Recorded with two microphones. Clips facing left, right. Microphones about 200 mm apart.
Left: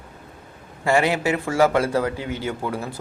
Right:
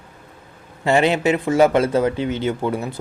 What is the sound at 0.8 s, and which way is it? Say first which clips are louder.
Speech: right 3 dB; 25° right (ahead or behind).